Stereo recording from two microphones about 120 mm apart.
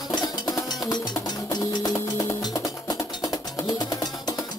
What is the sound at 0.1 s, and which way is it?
Music, 35° left (ahead or behind).